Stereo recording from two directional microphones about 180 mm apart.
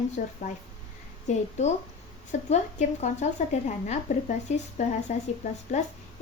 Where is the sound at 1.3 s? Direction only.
40° left (ahead or behind).